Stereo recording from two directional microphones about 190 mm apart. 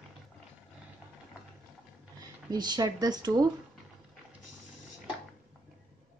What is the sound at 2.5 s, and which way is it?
Speech, 20° right (ahead or behind).